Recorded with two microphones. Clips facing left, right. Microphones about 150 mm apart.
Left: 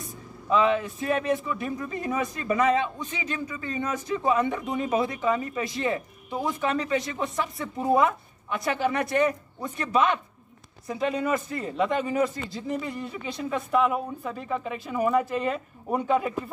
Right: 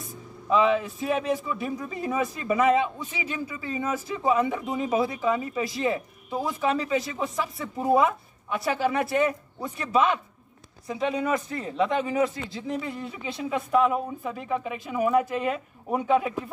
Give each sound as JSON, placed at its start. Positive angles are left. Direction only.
{"t": 0.0, "sound": "speech", "side_deg": 0}